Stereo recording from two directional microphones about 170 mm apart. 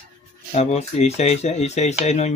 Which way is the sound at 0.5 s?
40° left (ahead or behind).